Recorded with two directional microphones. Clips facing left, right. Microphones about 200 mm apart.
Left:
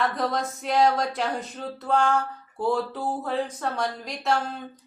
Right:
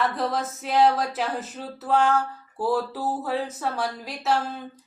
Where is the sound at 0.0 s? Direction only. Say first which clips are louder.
Even; centre (ahead or behind).